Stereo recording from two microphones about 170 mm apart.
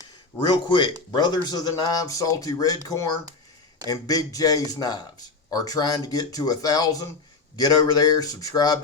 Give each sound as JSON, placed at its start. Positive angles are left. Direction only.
{"t": 0.5, "sound": "speech", "side_deg": 25}